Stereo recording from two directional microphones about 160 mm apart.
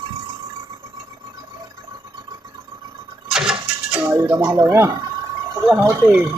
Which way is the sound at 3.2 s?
5° right (ahead or behind).